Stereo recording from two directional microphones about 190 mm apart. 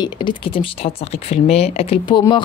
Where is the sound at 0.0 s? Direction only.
25° left (ahead or behind).